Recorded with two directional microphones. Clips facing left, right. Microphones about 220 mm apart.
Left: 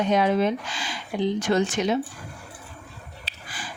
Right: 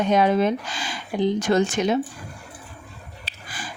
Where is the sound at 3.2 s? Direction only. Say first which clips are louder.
Right 3 dB; 45° right (ahead or behind).